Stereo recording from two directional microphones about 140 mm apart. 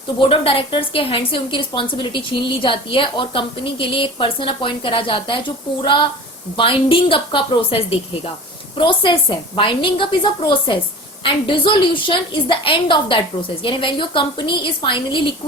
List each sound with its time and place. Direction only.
0.2 s a woman's voice: 40° left (ahead or behind)
6.6 s a woman's voice: 40° left (ahead or behind)